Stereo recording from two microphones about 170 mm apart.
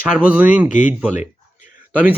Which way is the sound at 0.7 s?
50° left (ahead or behind).